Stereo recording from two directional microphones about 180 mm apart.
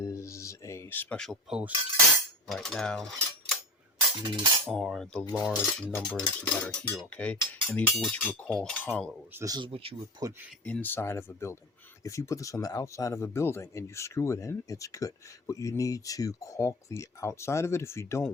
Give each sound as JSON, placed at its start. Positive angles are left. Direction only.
{"t": 0.0, "sound": "a sound", "side_deg": 15}
{"t": 2.5, "sound": "mechanisms", "side_deg": 0}
{"t": 4.6, "sound": "cutlery", "side_deg": 0}
{"t": 6.4, "sound": "speech", "side_deg": 5}
{"t": 9.3, "sound": "speech", "side_deg": -20}
{"t": 10.7, "sound": "speech", "side_deg": 10}